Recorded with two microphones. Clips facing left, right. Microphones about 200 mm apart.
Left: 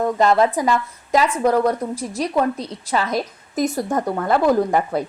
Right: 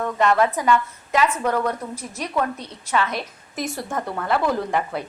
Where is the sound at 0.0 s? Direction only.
35° left (ahead or behind).